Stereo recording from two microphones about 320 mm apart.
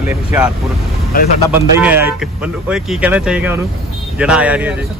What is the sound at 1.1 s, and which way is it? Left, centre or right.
Speech, left.